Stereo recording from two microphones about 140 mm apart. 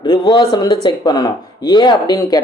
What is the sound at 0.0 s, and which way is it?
Speech, 30° left (ahead or behind).